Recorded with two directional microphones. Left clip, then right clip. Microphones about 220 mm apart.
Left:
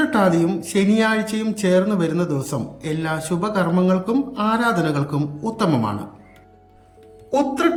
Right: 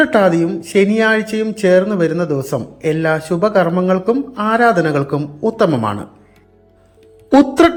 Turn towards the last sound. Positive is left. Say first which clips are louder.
# right 8 dB
turn(degrees=-25)  # may be behind; listen again after turning